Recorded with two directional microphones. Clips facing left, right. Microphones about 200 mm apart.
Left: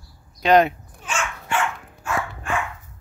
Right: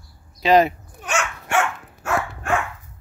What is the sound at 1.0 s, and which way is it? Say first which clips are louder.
Dog: right 4 dB; 70° right (ahead or behind).